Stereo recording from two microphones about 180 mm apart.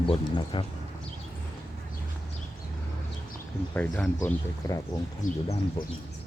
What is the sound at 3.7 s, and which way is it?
Speech, 10° left (ahead or behind).